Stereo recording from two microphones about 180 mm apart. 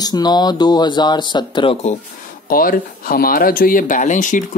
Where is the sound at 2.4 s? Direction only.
50° left (ahead or behind).